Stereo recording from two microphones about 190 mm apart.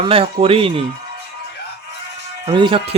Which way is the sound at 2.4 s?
25° right (ahead or behind).